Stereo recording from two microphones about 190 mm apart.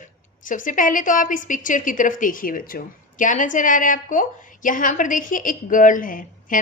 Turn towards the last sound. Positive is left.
turn(degrees=45)  # may be behind; listen again after turning